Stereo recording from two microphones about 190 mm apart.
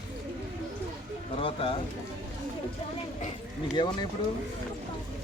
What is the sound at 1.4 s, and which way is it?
Speech, 30° left (ahead or behind).